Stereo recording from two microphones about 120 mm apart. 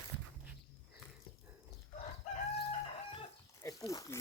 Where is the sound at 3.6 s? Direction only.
25° left (ahead or behind).